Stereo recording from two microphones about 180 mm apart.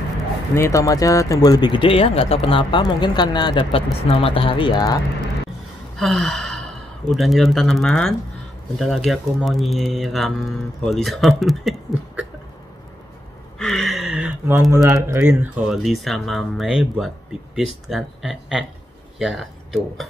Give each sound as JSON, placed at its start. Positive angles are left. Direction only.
{"t": 0.6, "sound": "speech", "side_deg": 20}
{"t": 5.9, "sound": "gasp", "side_deg": 0}
{"t": 7.1, "sound": "speech", "side_deg": 0}
{"t": 13.6, "sound": "a sound", "side_deg": 0}
{"t": 14.5, "sound": "speech", "side_deg": -15}